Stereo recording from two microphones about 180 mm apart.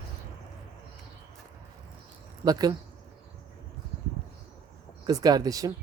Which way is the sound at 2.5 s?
20° right (ahead or behind).